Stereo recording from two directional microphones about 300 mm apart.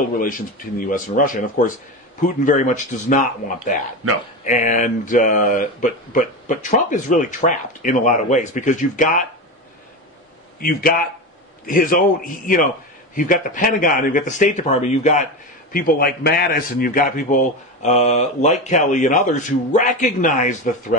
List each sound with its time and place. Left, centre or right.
0.2 s a man's voice: left
4.5 s a man's voice: left
10.6 s a man's voice: left